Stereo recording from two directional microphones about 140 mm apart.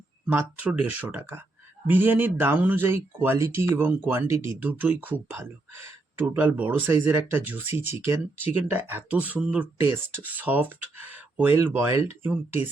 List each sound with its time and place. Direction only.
0.3 s speech: 10° right (ahead or behind)